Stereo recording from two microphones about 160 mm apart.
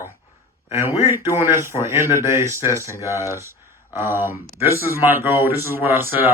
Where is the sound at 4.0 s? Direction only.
15° right (ahead or behind).